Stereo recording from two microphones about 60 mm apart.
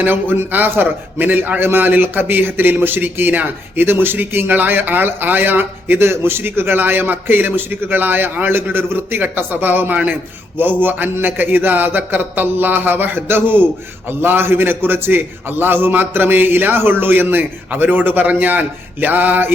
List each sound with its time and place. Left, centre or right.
0.0 s a man's voice: right